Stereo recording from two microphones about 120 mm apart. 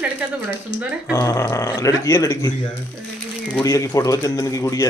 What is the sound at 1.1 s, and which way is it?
A man's voice, 25° left (ahead or behind).